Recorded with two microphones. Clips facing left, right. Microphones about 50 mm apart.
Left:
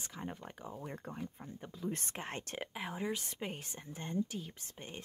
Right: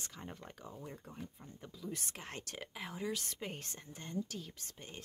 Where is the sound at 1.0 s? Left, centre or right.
Left.